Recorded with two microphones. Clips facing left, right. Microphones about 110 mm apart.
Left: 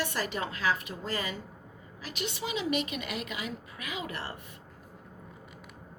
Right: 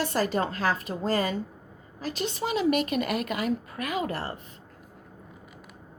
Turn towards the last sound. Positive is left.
turn(degrees=-40)  # may be behind; listen again after turning